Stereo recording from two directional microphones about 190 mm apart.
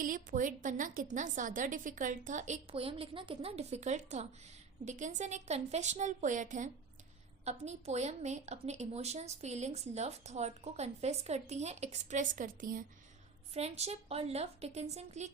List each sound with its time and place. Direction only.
0.0 s a woman's voice: 45° right (ahead or behind)
13.5 s a woman's voice: 35° right (ahead or behind)